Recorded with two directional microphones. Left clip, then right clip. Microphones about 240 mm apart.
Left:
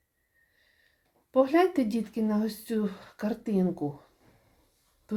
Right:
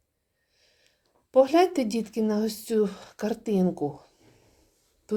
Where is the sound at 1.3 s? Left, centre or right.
Right.